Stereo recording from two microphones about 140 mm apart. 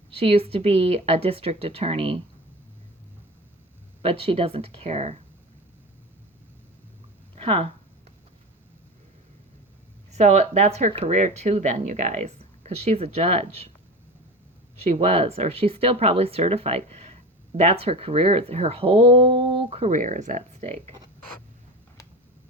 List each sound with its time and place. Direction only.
0.1 s speech: 40° right (ahead or behind)
4.0 s speech: 40° right (ahead or behind)
7.3 s speech: 45° right (ahead or behind)
10.1 s speech: 55° right (ahead or behind)
14.8 s speech: 45° right (ahead or behind)
19.9 s speech: 65° right (ahead or behind)